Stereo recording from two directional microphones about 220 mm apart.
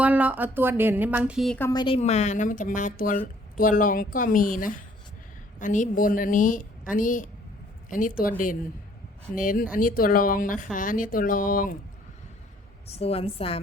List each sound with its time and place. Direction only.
0.0 s speech: 5° right (ahead or behind)
1.5 s a woman's voice: 15° left (ahead or behind); by 11.8 s 40° left (ahead or behind)
12.9 s a woman's voice: 25° left (ahead or behind)